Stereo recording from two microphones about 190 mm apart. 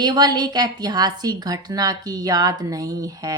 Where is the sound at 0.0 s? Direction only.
20° right (ahead or behind).